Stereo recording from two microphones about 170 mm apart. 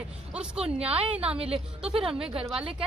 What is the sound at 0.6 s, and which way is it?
Speech, 35° right (ahead or behind).